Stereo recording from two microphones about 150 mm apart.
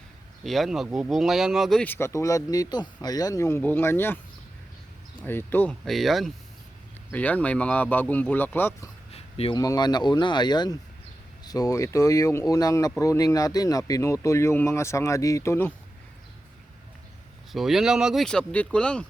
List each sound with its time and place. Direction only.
0.4 s speech: centre (ahead or behind)
1.8 s speech: 15° left (ahead or behind)
5.2 s speech: 15° left (ahead or behind)
5.8 s speech: centre (ahead or behind)
9.1 s a sound: 40° left (ahead or behind)
9.6 s speech: 25° left (ahead or behind)
17.5 s speech: centre (ahead or behind)